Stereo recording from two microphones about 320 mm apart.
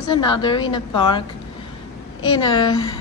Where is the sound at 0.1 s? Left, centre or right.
Centre.